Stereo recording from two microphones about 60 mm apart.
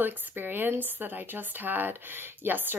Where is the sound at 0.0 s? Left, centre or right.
Right.